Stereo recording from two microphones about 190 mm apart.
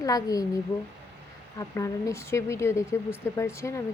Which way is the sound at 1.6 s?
15° left (ahead or behind).